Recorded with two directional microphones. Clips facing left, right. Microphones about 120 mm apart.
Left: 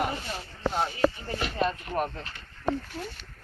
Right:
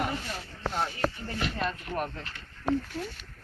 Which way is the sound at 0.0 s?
10° left (ahead or behind).